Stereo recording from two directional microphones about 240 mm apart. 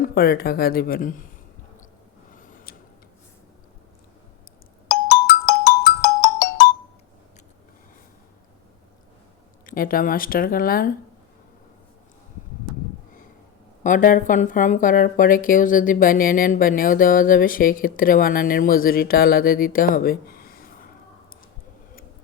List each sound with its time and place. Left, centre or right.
0.0 s speech: left
2.3 s a sound: left
4.9 s ringtone: left
9.6 s speech: left
13.8 s speech: left